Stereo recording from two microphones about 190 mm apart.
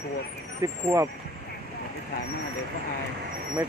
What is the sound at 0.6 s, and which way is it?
Speech, 15° right (ahead or behind).